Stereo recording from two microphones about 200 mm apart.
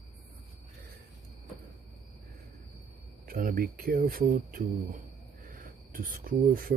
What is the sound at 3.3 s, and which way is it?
Speech, 45° right (ahead or behind).